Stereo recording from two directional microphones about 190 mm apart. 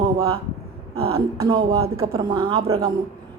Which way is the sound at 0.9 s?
30° right (ahead or behind).